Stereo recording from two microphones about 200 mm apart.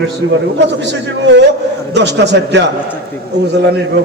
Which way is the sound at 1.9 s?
60° right (ahead or behind).